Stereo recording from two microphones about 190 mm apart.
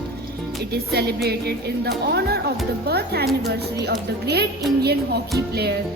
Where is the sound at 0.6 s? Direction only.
60° right (ahead or behind).